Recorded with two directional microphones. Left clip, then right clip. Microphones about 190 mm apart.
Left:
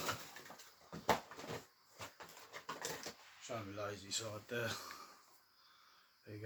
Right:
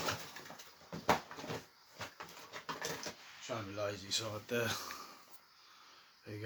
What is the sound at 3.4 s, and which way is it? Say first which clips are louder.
Speech: right 5 dB; 15° right (ahead or behind).